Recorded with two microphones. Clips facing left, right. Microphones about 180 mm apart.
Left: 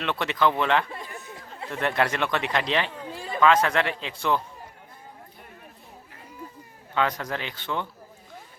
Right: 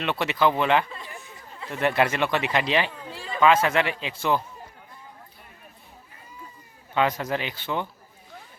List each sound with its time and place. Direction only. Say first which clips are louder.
0.0 s a man's voice: right 1 dB; 5° right (ahead or behind)
3.1 s chatter: left 2 dB; 50° left (ahead or behind)
3.4 s speech: right 1 dB; 5° right (ahead or behind)
6.9 s a man's voice: right 2 dB; 15° right (ahead or behind)